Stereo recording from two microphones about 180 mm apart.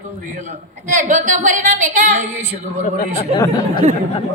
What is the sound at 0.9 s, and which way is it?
A woman's voice, 45° right (ahead or behind).